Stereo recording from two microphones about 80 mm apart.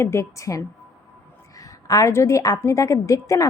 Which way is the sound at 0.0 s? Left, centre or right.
Left.